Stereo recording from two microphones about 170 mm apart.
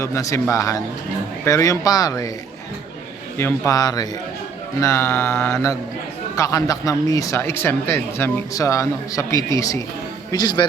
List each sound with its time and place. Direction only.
0.0 s speech: 20° left (ahead or behind)
3.3 s speech: 15° left (ahead or behind)
4.8 s mantra: 15° left (ahead or behind)
6.3 s speech: 20° left (ahead or behind)